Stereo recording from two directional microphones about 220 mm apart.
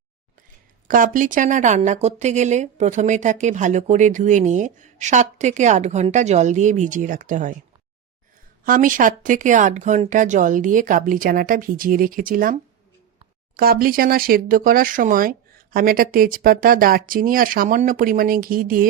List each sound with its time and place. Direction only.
0.9 s speech: 40° right (ahead or behind)
8.6 s speech: 40° right (ahead or behind)
13.6 s speech: 40° right (ahead or behind)